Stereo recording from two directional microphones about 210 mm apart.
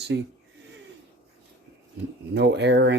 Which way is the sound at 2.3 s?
55° right (ahead or behind).